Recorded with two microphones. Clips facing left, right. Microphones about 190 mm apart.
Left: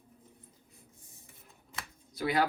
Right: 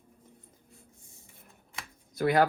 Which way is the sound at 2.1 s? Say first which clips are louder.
Right 5 dB; 50° right (ahead or behind).